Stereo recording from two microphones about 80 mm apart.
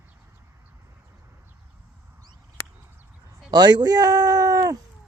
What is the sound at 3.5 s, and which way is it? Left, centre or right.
Speech, right.